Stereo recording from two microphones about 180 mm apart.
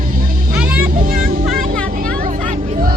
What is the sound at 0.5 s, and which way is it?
Music, 10° right (ahead or behind).